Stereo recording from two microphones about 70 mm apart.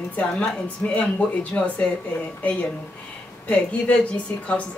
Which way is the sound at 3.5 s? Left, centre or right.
Centre.